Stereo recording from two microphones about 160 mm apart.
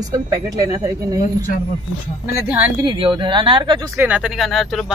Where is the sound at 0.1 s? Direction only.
20° right (ahead or behind).